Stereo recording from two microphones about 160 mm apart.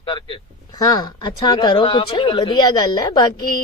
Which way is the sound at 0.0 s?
30° left (ahead or behind).